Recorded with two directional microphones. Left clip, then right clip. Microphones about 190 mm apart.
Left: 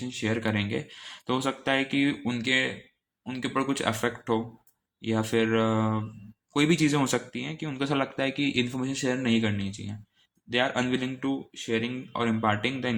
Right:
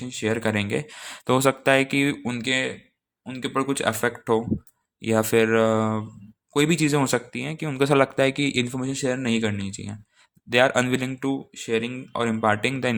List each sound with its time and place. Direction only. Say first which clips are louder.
0.0 s speech: right 4 dB; 35° right (ahead or behind)